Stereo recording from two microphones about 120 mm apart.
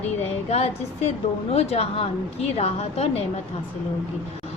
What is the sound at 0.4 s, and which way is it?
A woman's voice, 60° left (ahead or behind).